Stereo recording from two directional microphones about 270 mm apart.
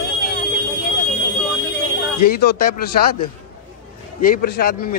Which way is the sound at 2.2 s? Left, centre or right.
Left.